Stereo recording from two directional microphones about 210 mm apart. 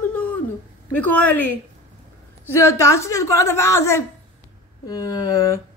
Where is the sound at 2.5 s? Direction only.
15° left (ahead or behind).